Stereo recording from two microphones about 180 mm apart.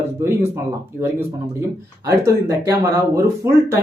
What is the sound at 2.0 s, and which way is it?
Speech, 15° right (ahead or behind).